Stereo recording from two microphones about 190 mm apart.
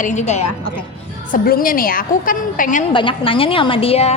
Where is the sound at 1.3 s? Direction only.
50° left (ahead or behind).